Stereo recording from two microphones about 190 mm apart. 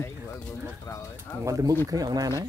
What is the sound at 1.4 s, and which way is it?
Speech, 15° right (ahead or behind).